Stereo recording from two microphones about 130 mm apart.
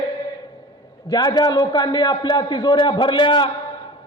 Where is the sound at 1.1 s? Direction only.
30° left (ahead or behind).